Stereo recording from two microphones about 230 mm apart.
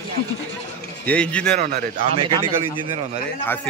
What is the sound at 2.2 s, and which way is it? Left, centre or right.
Speech, right.